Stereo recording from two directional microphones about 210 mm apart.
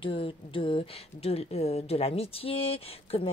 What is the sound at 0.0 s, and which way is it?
A woman's voice, 25° left (ahead or behind).